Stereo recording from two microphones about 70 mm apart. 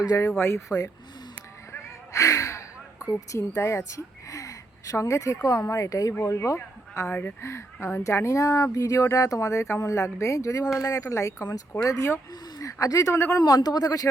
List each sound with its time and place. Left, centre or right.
0.3 s speech: left
2.1 s gasp: left
3.1 s a woman's voice: left
6.9 s speech: left
7.4 s speech: left
13.1 s speech: left
13.4 s a man's voice: left